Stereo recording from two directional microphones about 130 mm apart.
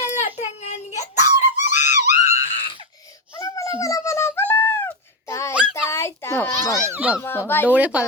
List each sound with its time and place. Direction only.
0.0 s child singing: 60° left (ahead or behind)
0.9 s screaming: 65° left (ahead or behind); by 2.7 s 50° left (ahead or behind)
3.3 s a sound: 25° left (ahead or behind)
6.8 s a child's voice: 15° right (ahead or behind)
7.2 s speech: 15° left (ahead or behind)
7.7 s a child's voice: 10° right (ahead or behind)